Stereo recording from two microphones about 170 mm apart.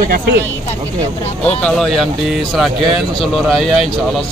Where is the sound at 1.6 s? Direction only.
Centre (ahead or behind).